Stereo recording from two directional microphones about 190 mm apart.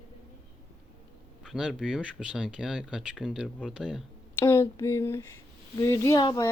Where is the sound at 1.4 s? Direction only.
Centre (ahead or behind).